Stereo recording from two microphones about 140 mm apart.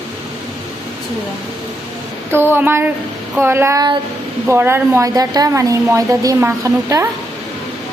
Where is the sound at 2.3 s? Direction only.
15° right (ahead or behind).